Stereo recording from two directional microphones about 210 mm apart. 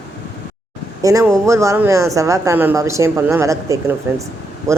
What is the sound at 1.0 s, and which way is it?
Speech, 15° right (ahead or behind).